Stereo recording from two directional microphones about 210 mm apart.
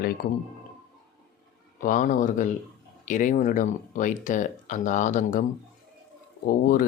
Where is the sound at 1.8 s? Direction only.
40° left (ahead or behind).